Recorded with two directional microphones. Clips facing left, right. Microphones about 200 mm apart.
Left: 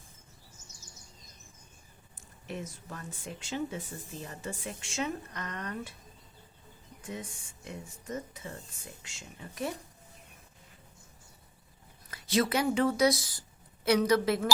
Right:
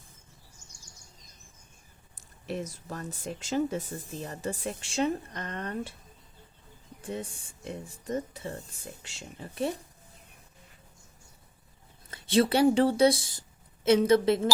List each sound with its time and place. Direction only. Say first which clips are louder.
2.5 s speech: right 5 dB; 40° right (ahead or behind)
7.0 s speech: right 5 dB; 30° right (ahead or behind)
12.1 s speech: right 4 dB; 30° right (ahead or behind)